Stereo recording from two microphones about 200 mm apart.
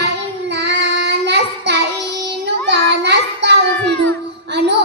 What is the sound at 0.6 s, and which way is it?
Child singing, 60° right (ahead or behind).